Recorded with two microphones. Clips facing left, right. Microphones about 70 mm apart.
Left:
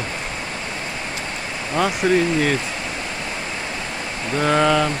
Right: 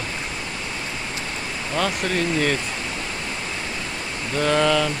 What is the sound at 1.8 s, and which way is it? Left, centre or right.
Speech, centre.